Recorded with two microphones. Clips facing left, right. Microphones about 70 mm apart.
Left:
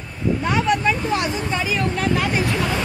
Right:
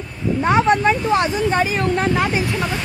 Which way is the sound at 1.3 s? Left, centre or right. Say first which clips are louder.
Right 6 dB; right.